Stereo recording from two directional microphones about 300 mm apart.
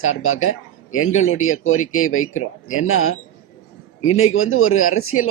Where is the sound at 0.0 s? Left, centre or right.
Left.